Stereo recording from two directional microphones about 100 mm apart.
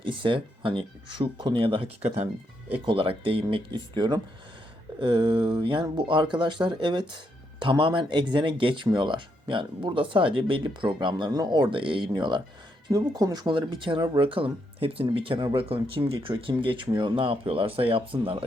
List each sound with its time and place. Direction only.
0.0 s speech: 55° right (ahead or behind); by 2.3 s 90° right
2.8 s speech: 65° right (ahead or behind)
3.5 s speech: 50° right (ahead or behind)
12.9 s speech: 40° right (ahead or behind); by 18.4 s 65° right (ahead or behind)